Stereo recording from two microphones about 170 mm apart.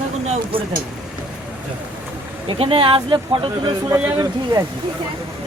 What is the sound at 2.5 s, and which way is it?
Speech, 30° right (ahead or behind).